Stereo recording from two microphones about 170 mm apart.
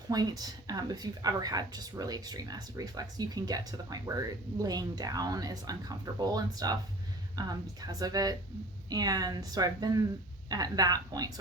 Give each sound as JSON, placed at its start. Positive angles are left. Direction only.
{"t": 0.1, "sound": "a woman's voice", "side_deg": -20}